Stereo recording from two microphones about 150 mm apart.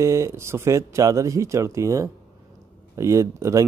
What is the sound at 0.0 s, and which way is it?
Speech, 20° right (ahead or behind).